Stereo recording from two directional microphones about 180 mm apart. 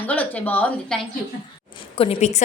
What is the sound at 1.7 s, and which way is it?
Speech, 30° left (ahead or behind).